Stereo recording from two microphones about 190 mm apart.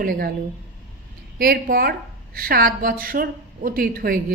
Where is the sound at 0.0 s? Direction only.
50° right (ahead or behind).